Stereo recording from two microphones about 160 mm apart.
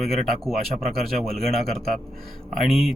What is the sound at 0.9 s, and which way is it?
Speech, centre (ahead or behind).